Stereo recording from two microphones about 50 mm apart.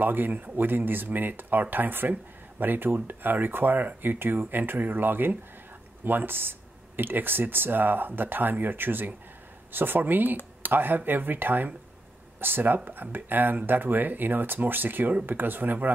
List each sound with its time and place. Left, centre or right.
0.0 s speech: right